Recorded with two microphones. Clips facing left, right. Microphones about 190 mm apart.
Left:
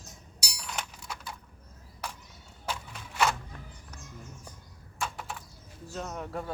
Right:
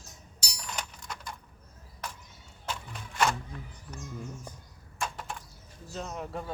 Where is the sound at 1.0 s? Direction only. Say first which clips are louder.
Even; 5° left (ahead or behind).